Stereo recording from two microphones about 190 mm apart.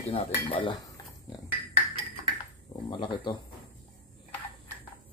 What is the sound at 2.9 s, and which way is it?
Speech, 25° left (ahead or behind).